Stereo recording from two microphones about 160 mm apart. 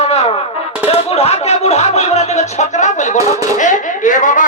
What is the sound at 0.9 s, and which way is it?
A man's voice, 40° left (ahead or behind).